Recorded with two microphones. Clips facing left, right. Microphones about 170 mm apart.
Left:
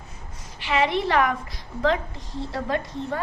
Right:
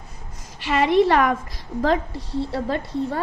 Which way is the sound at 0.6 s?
40° right (ahead or behind).